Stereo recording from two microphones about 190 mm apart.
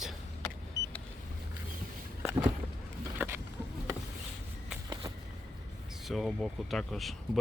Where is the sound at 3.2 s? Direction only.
10° right (ahead or behind).